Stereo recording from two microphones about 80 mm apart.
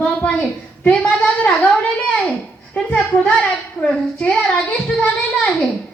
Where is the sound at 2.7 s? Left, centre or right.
Centre.